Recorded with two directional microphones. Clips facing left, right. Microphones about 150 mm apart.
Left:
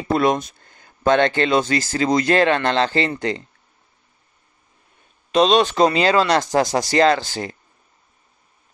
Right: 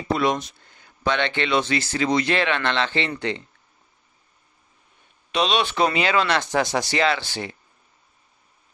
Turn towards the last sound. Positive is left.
turn(degrees=40)  # may be behind; listen again after turning